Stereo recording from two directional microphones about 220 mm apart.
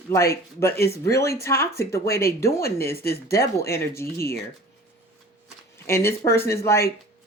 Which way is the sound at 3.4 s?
10° left (ahead or behind).